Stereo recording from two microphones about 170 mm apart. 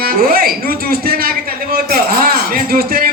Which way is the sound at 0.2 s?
60° right (ahead or behind).